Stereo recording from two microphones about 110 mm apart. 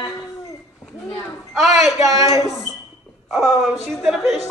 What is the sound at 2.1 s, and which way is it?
Speech, 35° right (ahead or behind).